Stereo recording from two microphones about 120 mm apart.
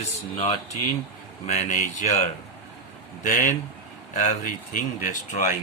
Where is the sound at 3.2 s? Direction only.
90° left.